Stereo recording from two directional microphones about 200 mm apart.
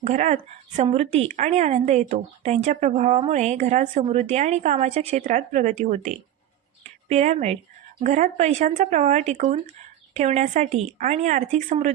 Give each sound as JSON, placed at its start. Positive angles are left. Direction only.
{"t": 0.0, "sound": "a woman's voice", "side_deg": -35}